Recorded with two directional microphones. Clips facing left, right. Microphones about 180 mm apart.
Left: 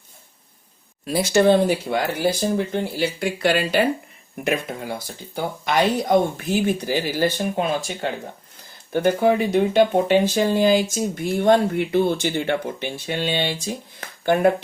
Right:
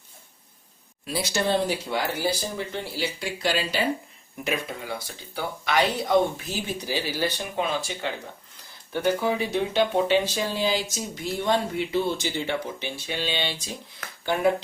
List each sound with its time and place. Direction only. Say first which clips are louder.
1.0 s speech: left 9 dB; 50° left (ahead or behind)
5.3 s speech: left 3 dB; 45° left (ahead or behind)
8.9 s speech: left 6 dB; 55° left (ahead or behind)